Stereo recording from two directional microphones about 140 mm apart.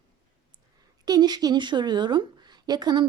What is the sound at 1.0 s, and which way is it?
A woman's voice, 30° right (ahead or behind).